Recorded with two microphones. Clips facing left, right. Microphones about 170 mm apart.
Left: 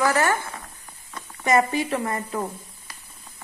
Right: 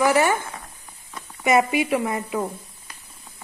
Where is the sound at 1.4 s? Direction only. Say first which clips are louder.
Right 2 dB; 10° right (ahead or behind).